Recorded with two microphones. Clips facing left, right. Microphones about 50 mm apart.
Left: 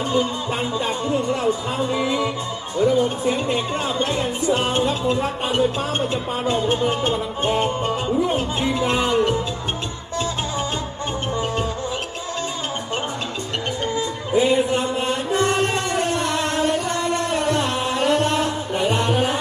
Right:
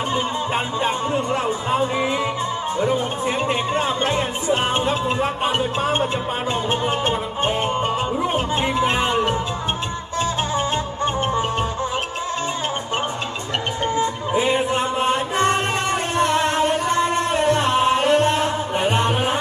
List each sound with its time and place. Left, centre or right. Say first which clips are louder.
0.1 s music: left 1 dB; right
1.5 s speech: right 1 dB; right
10.2 s music: right 3 dB; right
13.8 s music: right 3 dB; right